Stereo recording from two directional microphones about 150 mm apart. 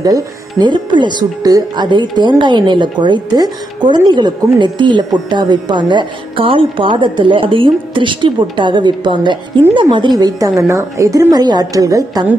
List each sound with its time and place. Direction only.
0.0 s a woman's voice: 25° right (ahead or behind)